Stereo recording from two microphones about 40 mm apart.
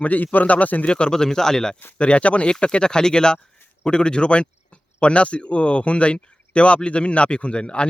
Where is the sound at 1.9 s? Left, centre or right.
Left.